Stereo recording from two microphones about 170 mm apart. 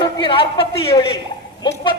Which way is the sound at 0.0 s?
30° left (ahead or behind).